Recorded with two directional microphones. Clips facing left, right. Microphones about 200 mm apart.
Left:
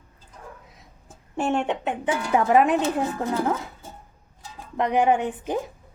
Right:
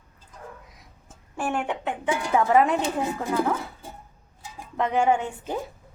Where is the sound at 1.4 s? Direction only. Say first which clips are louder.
Left 4 dB; 25° left (ahead or behind).